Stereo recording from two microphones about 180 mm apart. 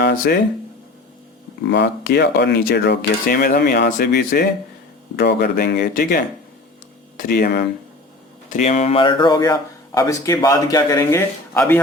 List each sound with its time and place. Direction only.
0.0 s speech: 65° left (ahead or behind)
1.7 s speech: 70° left (ahead or behind)
8.4 s speech: 45° left (ahead or behind); by 11.8 s 15° left (ahead or behind)